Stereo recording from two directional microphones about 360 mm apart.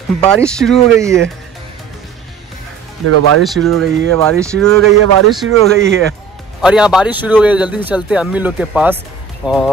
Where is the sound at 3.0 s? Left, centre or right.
Right.